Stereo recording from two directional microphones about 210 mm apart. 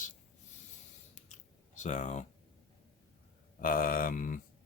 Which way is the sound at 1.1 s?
35° left (ahead or behind).